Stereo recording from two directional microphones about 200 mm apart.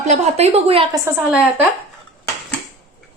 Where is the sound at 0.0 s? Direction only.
35° right (ahead or behind).